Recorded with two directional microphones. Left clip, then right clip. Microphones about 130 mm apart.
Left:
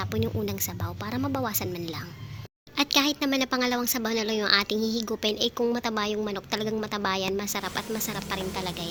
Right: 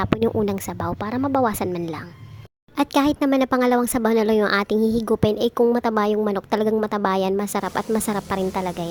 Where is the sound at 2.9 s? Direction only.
55° right (ahead or behind).